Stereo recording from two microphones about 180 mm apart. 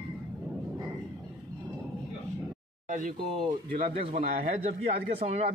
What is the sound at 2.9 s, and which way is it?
Speech, 45° right (ahead or behind).